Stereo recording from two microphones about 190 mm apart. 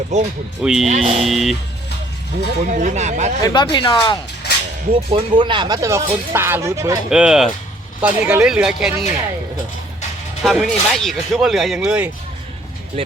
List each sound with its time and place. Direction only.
0.1 s speech: 40° right (ahead or behind)
0.6 s speech: centre (ahead or behind)
0.9 s speech: 35° right (ahead or behind)
1.2 s speech: centre (ahead or behind)
2.6 s speech: 40° right (ahead or behind)
3.4 s speech: 25° left (ahead or behind)
4.9 s speech: 30° right (ahead or behind)
7.1 s speech: 5° right (ahead or behind)
10.4 s speech: centre (ahead or behind)